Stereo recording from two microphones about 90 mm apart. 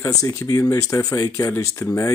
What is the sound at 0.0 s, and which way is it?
Speech, 40° left (ahead or behind).